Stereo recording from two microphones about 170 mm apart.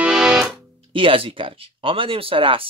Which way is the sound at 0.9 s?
30° right (ahead or behind).